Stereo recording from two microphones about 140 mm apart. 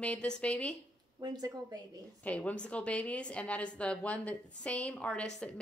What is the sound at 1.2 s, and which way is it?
Speech, 30° right (ahead or behind).